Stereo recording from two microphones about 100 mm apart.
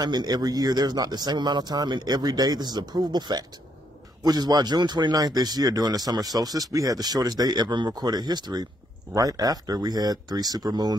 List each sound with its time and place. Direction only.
0.0 s speech: 45° right (ahead or behind)